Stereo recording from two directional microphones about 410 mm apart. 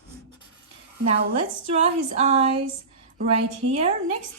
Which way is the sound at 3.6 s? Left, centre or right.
Centre.